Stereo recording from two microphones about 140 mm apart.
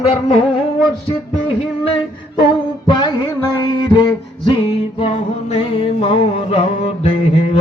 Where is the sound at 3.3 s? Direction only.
25° left (ahead or behind); by 6.7 s 45° left (ahead or behind).